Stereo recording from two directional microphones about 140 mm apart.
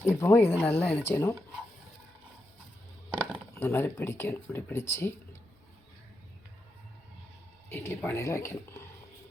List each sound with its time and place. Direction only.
0.0 s speech: 20° left (ahead or behind)
3.1 s a sound: 10° right (ahead or behind)
3.6 s speech: 15° left (ahead or behind)
7.7 s speech: 15° left (ahead or behind)